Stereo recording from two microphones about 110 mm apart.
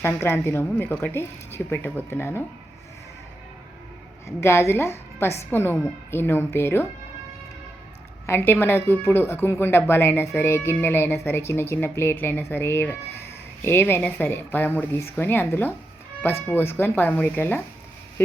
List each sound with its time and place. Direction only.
0.0 s speech: 25° left (ahead or behind)
4.3 s speech: 25° left (ahead or behind)
8.3 s speech: 20° left (ahead or behind)